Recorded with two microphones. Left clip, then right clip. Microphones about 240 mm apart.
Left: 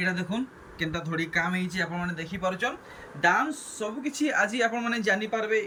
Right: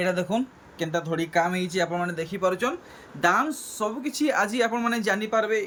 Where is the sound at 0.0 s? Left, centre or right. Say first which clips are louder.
Right 4 dB; centre.